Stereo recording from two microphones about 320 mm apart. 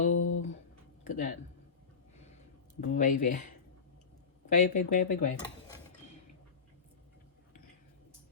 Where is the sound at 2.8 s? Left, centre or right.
Left.